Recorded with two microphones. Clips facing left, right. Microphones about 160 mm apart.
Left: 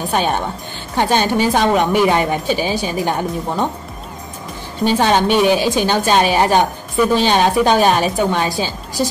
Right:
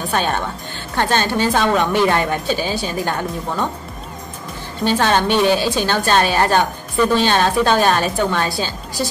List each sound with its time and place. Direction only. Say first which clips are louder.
0.1 s a woman's voice: left 2 dB; 15° left (ahead or behind)
4.8 s a woman's voice: left 2 dB; 15° left (ahead or behind)